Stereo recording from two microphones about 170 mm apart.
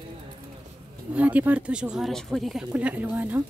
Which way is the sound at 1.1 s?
10° right (ahead or behind).